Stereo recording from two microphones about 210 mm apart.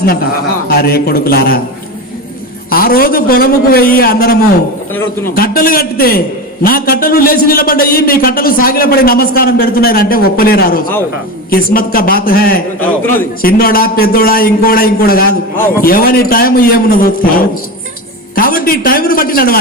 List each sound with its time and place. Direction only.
0.7 s a man's voice: 45° left (ahead or behind)
2.6 s a man's voice: 45° left (ahead or behind)